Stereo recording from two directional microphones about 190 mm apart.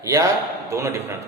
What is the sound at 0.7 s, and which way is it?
Speech, 15° right (ahead or behind).